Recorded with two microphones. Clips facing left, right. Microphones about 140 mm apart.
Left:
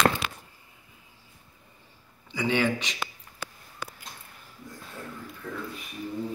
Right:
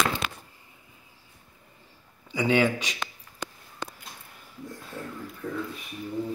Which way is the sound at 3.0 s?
5° left (ahead or behind).